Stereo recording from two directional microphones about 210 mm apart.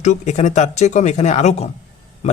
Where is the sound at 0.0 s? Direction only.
35° left (ahead or behind).